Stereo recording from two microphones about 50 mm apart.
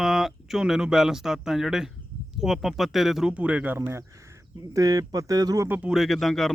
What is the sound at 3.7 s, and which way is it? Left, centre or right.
Speech, right.